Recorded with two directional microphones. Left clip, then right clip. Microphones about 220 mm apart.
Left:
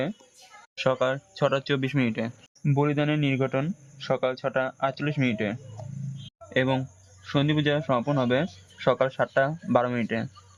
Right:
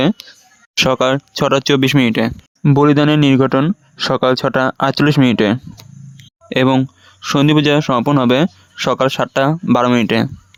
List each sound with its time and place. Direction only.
0.8 s speech: 50° right (ahead or behind)
2.7 s speech: 55° right (ahead or behind)